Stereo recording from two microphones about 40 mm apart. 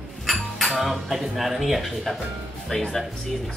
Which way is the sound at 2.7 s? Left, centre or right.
Centre.